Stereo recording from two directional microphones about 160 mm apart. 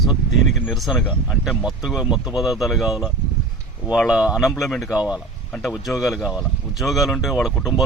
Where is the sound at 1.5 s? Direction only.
Centre (ahead or behind).